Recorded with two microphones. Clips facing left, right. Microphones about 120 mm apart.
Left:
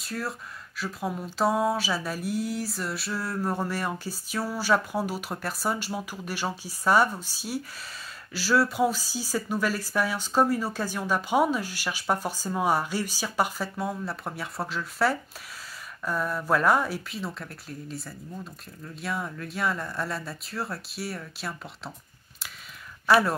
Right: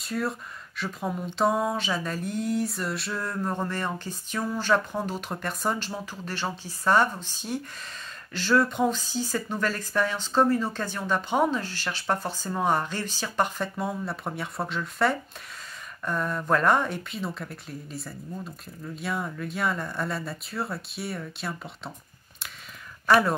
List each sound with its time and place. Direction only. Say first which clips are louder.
0.0 s speech: right 4 dB; centre (ahead or behind)
23.0 s speech: even; 5° left (ahead or behind)